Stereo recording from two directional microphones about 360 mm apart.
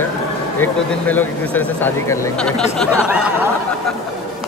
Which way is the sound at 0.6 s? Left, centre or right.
Centre.